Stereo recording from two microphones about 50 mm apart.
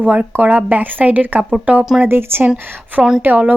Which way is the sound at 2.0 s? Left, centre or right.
Right.